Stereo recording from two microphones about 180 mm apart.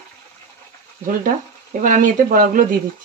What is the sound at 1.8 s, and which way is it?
Speech, 45° right (ahead or behind).